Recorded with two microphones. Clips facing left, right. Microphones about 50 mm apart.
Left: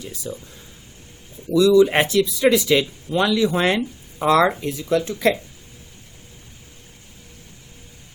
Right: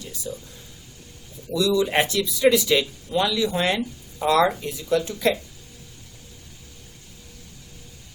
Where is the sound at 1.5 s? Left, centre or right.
Left.